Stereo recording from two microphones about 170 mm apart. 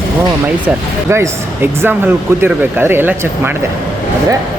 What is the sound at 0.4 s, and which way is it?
Speech, 10° right (ahead or behind).